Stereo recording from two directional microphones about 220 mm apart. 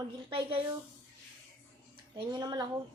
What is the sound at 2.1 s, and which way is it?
Speech, 20° right (ahead or behind).